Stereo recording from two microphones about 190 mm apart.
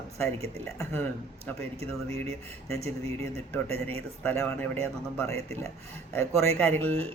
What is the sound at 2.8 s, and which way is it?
Speech, 35° right (ahead or behind).